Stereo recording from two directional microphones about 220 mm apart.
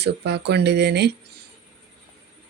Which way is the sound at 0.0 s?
50° right (ahead or behind).